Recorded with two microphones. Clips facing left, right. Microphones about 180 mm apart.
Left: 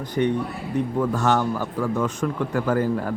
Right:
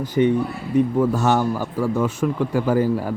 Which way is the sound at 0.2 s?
10° right (ahead or behind).